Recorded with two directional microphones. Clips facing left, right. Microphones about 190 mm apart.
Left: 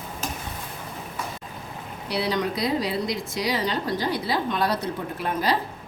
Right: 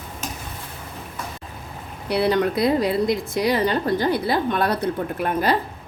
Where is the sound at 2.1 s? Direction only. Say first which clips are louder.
Right 6 dB; 55° right (ahead or behind).